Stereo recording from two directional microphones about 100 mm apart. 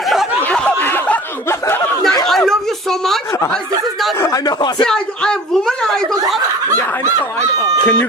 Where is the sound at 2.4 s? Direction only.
5° left (ahead or behind).